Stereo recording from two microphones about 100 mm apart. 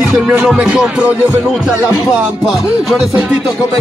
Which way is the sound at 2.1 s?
Centre (ahead or behind).